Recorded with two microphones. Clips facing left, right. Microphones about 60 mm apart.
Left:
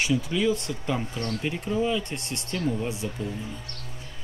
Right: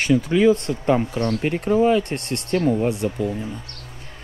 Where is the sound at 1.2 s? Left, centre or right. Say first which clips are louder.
Right 8 dB; right.